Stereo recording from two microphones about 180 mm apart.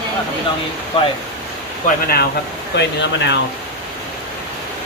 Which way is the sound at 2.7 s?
75° left (ahead or behind).